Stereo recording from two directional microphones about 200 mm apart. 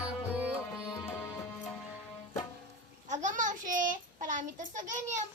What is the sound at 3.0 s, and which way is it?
Child singing, 40° right (ahead or behind).